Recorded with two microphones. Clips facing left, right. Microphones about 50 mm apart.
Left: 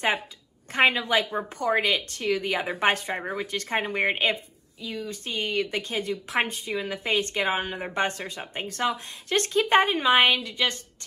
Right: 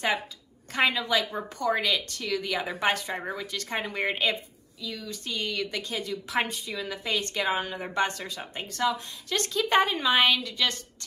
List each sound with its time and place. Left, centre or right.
0.7 s a woman's voice: left